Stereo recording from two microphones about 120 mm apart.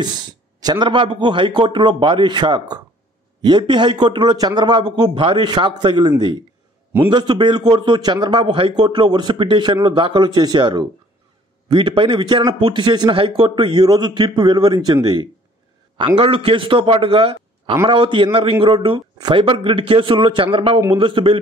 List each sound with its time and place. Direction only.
0.6 s a man's voice: 35° right (ahead or behind)
13.7 s a man's voice: 35° right (ahead or behind)
16.2 s a man's voice: 50° right (ahead or behind)